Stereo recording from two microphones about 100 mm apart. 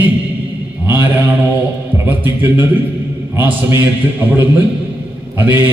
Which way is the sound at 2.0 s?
20° right (ahead or behind).